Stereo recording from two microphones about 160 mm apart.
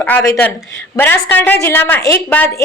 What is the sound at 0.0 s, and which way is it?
A woman's voice, 10° left (ahead or behind).